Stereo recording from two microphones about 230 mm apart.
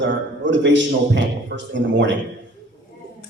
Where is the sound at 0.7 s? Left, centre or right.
Right.